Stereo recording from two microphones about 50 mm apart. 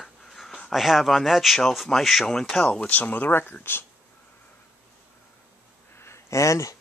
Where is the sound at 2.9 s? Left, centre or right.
Left.